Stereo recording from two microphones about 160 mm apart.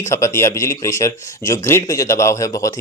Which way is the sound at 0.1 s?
20° left (ahead or behind).